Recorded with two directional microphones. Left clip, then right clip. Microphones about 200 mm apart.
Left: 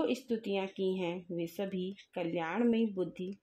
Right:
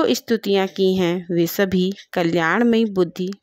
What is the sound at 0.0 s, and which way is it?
Speech, 55° right (ahead or behind).